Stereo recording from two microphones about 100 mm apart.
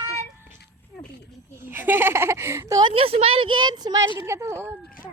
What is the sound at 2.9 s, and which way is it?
A woman's voice, 80° right.